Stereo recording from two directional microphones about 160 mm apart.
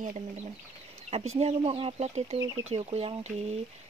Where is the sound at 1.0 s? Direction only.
40° right (ahead or behind).